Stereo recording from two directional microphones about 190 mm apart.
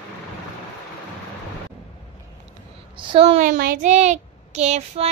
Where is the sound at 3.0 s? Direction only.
30° right (ahead or behind).